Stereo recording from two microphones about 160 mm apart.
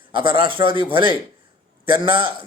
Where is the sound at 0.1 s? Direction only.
30° right (ahead or behind).